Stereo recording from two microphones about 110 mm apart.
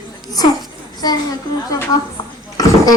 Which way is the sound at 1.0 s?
35° left (ahead or behind).